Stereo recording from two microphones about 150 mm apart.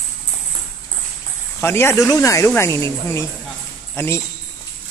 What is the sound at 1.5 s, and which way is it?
Speech, 15° left (ahead or behind).